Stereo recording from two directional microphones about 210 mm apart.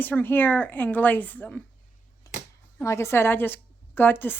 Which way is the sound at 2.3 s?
15° left (ahead or behind).